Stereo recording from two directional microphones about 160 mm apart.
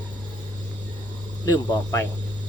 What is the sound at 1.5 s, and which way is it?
Speech, 25° left (ahead or behind).